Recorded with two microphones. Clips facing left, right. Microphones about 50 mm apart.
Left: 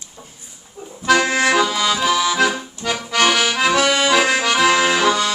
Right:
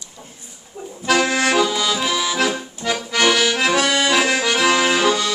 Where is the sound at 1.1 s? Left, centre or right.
Centre.